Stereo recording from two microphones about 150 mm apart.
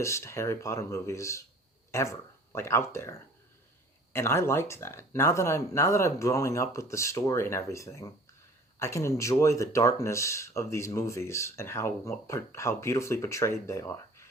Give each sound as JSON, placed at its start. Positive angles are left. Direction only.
{"t": 0.0, "sound": "speech", "side_deg": 20}